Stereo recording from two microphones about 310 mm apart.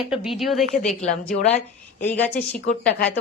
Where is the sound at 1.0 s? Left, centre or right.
Left.